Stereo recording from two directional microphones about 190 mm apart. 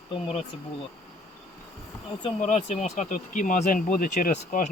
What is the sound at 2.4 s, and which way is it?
Speech, 40° left (ahead or behind).